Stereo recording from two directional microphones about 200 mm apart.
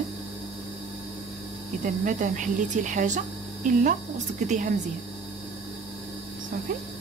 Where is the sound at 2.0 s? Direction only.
40° right (ahead or behind).